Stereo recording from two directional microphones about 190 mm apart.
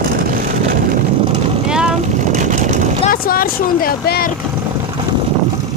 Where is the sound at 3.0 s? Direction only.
50° left (ahead or behind).